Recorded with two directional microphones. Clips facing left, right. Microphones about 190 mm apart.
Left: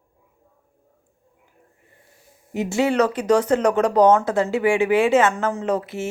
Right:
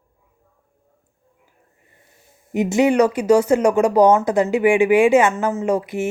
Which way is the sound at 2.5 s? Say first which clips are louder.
Right 4 dB; 15° right (ahead or behind).